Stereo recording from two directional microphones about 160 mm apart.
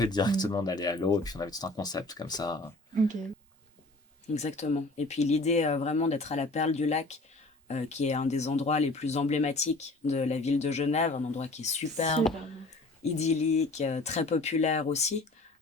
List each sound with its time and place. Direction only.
0.0 s speech: 25° left (ahead or behind)
4.4 s speech: 45° left (ahead or behind)